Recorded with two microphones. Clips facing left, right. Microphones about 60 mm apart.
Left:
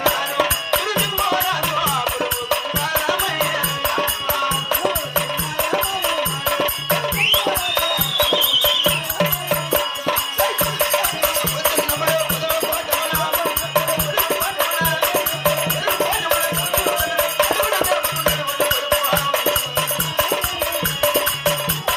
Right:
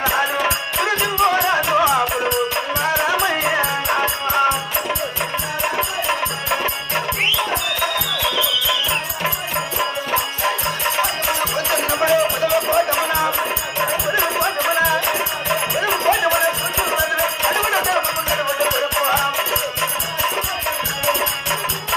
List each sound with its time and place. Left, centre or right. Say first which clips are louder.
0.8 s music: right 4 dB; right
2.8 s music: right 6 dB; right
11.7 s music: right 4 dB; right